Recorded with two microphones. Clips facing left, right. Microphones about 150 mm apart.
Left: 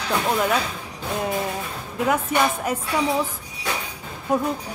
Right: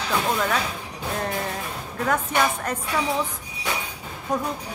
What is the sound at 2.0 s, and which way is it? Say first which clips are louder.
Speech: left 2 dB; 10° left (ahead or behind).